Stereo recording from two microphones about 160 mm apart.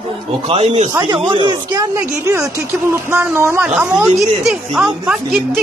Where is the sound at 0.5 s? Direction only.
40° right (ahead or behind).